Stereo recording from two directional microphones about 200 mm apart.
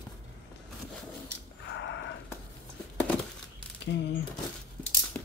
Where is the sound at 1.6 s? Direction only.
60° left (ahead or behind).